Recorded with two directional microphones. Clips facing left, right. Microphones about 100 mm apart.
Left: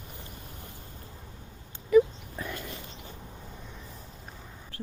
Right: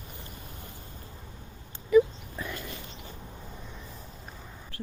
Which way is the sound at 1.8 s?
50° left (ahead or behind).